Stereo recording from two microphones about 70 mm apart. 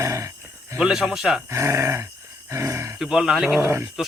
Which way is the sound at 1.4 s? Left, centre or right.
Right.